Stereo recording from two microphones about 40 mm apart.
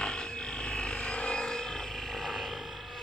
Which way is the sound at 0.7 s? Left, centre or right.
Left.